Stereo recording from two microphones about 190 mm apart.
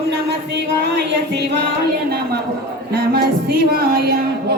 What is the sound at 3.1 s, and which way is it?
Music, 55° right (ahead or behind).